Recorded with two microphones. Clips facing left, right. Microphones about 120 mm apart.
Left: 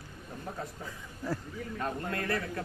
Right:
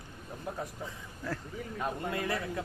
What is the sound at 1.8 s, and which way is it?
Speech, 15° right (ahead or behind).